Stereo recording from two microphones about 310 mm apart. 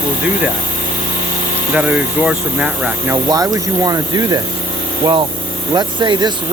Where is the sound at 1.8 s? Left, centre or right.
Centre.